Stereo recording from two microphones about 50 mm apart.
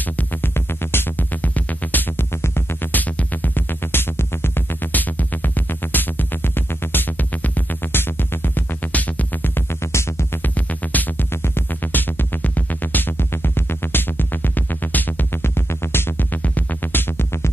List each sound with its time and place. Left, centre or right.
0.3 s music: left
2.4 s music: left
2.9 s music: left
3.9 s music: left
4.9 s music: left
8.0 s music: left
8.9 s music: left
9.7 s music: left
10.4 s music: left
11.4 s music: left